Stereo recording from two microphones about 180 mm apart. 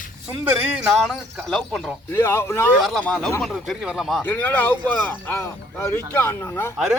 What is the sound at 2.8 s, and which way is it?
Speech, 5° left (ahead or behind).